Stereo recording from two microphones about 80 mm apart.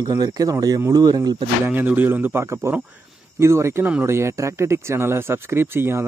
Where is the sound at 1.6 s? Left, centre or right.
Right.